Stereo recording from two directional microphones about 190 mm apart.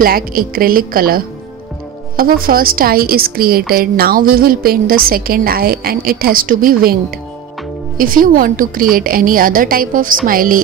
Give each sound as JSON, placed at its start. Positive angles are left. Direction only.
{"t": 0.0, "sound": "a woman's voice", "side_deg": -50}
{"t": 8.0, "sound": "a woman's voice", "side_deg": -45}